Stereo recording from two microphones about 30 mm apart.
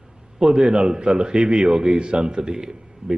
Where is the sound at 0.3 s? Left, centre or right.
Right.